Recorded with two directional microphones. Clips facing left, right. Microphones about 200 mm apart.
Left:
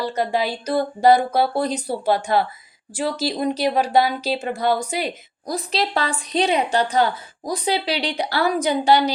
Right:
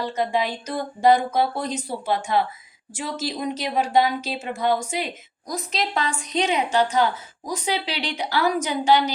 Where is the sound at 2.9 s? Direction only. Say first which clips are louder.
Left 5 dB; 35° left (ahead or behind).